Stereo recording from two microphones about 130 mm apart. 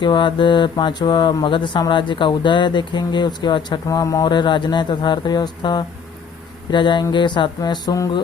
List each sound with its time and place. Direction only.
0.0 s speech: 40° left (ahead or behind)